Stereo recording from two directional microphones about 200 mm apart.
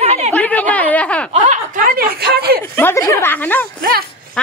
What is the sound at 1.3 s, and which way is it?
Speech, 35° right (ahead or behind).